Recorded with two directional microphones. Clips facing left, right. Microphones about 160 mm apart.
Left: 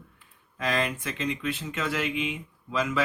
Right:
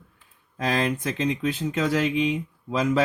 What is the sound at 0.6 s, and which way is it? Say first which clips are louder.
Speech: right 4 dB; 35° right (ahead or behind).